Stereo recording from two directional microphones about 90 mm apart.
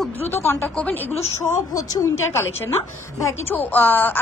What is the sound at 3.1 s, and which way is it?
Speech, 35° left (ahead or behind).